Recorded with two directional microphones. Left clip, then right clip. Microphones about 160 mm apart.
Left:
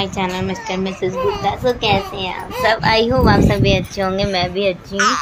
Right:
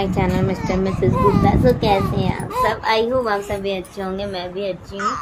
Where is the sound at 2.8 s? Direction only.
35° left (ahead or behind).